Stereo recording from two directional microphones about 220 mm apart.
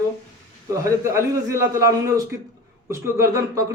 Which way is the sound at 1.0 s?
10° right (ahead or behind).